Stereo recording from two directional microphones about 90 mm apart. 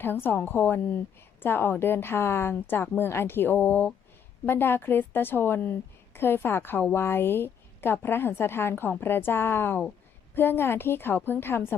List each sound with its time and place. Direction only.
0.0 s a woman's voice: 25° left (ahead or behind)